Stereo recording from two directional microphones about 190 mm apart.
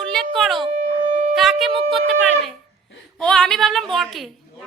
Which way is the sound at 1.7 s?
30° right (ahead or behind).